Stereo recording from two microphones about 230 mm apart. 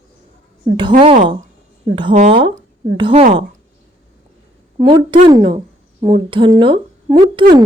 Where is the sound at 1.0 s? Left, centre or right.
Right.